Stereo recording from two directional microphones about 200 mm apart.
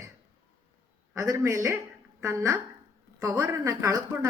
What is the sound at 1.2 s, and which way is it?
A man's voice, 15° right (ahead or behind).